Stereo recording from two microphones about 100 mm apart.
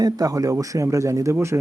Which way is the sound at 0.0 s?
40° right (ahead or behind).